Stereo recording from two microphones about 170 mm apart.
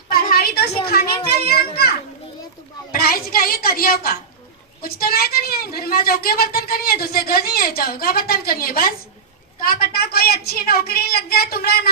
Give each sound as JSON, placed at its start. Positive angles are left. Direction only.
{"t": 0.1, "sound": "a sound", "side_deg": 60}
{"t": 0.9, "sound": "children playing", "side_deg": 65}
{"t": 2.9, "sound": "a woman's voice", "side_deg": 60}